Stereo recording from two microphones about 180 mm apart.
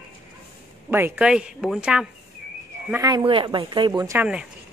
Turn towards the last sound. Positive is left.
turn(degrees=-15)  # may be behind; listen again after turning